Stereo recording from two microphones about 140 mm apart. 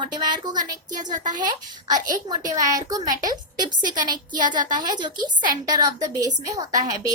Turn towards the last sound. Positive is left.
turn(degrees=-25)  # may be behind; listen again after turning